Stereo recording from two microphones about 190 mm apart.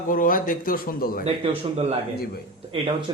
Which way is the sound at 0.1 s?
45° left (ahead or behind).